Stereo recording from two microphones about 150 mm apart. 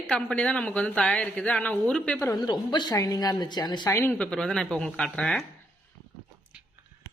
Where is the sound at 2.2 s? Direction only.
25° left (ahead or behind).